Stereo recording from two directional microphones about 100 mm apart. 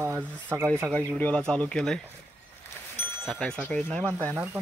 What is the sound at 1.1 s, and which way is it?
Speech, 15° left (ahead or behind).